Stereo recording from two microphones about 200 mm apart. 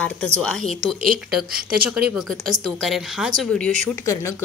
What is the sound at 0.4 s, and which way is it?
Speech, centre (ahead or behind).